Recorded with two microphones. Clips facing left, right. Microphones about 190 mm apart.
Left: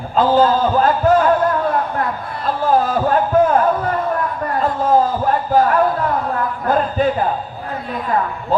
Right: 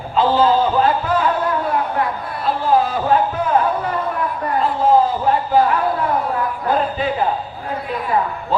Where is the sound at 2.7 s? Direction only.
45° left (ahead or behind).